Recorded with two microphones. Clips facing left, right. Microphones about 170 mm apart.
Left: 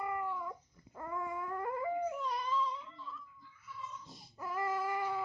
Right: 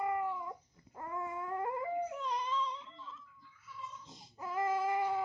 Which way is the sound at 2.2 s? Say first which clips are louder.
Left 1 dB; 20° right (ahead or behind).